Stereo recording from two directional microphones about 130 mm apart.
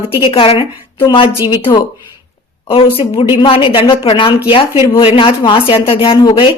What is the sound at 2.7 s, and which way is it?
Speech, 45° left (ahead or behind).